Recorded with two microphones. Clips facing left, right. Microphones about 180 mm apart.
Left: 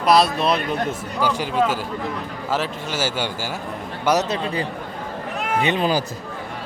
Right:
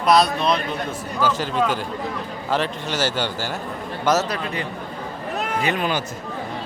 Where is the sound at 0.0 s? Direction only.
Centre (ahead or behind).